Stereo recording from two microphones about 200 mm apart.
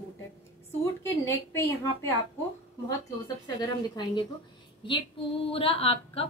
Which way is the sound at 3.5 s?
20° left (ahead or behind).